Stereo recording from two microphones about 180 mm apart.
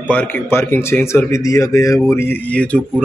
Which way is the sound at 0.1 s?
10° left (ahead or behind).